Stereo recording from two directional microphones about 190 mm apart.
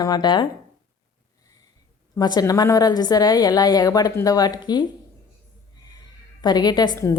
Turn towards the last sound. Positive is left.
turn(degrees=20)  # may be behind; listen again after turning